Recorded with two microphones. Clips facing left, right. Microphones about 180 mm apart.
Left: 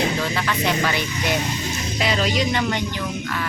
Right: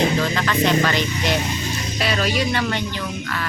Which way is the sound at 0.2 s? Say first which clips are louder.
Right 3 dB; 10° left (ahead or behind).